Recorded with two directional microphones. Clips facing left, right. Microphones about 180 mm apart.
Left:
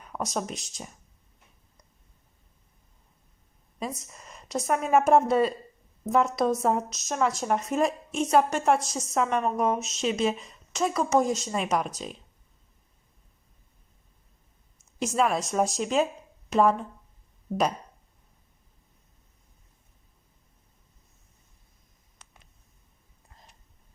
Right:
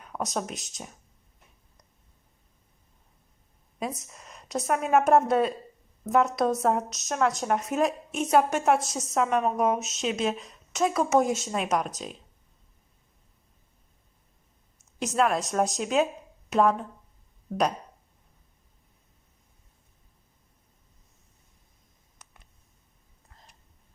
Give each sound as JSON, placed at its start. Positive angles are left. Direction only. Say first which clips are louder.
{"t": 0.0, "sound": "speech", "louder": "even", "side_deg": 0}
{"t": 3.8, "sound": "speech", "louder": "right 1 dB", "side_deg": 0}
{"t": 15.0, "sound": "speech", "louder": "even", "side_deg": 0}